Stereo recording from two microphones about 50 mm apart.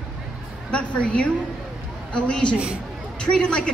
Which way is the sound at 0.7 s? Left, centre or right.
Left.